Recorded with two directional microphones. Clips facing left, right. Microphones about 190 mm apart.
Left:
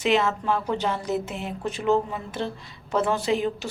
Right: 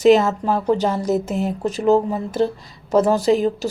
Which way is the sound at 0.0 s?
40° right (ahead or behind).